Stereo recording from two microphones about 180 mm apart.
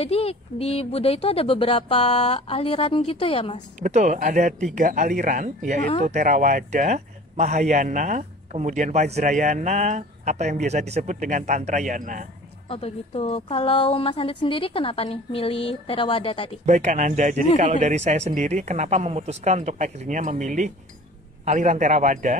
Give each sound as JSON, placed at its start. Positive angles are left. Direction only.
{"t": 0.0, "sound": "a woman's voice", "side_deg": 35}
{"t": 3.8, "sound": "a man's voice", "side_deg": -40}
{"t": 12.6, "sound": "a woman's voice", "side_deg": 35}
{"t": 16.6, "sound": "a man's voice", "side_deg": -40}